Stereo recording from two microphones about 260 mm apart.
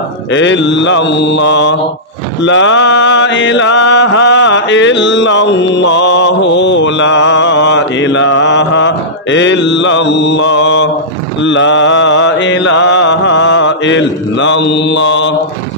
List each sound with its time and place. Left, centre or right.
0.3 s mantra: left